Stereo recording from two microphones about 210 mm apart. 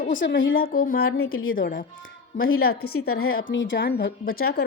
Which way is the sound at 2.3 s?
75° left (ahead or behind).